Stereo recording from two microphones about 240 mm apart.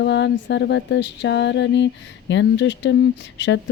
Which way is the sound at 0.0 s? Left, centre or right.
Left.